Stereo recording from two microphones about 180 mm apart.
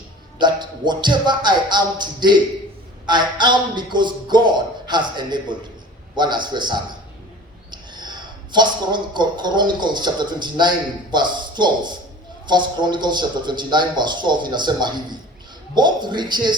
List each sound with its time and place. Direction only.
0.3 s a man's voice: 25° right (ahead or behind)